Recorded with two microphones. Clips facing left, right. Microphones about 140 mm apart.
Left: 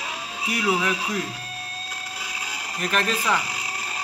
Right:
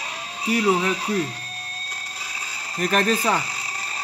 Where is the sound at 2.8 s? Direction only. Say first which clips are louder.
Right 4 dB; 40° right (ahead or behind).